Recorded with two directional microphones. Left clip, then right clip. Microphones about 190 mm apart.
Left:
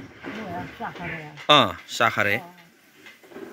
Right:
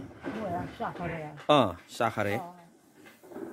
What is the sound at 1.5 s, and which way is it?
Speech, centre (ahead or behind).